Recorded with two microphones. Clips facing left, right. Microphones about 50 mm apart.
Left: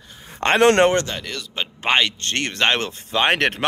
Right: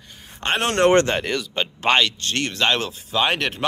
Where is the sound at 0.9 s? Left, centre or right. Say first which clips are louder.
Right 5 dB; right.